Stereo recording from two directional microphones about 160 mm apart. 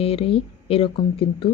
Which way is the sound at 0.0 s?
35° left (ahead or behind).